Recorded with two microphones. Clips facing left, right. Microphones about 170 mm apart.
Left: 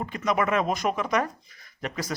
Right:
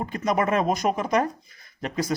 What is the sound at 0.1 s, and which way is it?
Speech, 35° right (ahead or behind).